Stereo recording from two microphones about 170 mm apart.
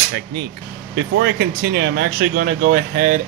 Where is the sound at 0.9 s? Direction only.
75° right (ahead or behind).